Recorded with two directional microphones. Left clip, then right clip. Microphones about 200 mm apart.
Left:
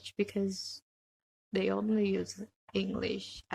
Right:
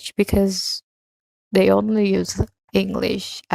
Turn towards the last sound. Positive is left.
turn(degrees=-50)  # may be behind; listen again after turning